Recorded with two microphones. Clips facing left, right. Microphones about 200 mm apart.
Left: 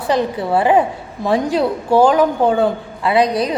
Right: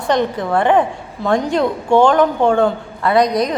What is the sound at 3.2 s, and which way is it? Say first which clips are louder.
Speech: right 1 dB; 30° left (ahead or behind).